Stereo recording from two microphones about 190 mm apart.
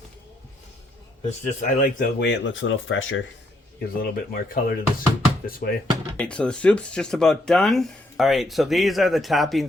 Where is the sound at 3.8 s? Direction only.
55° left (ahead or behind).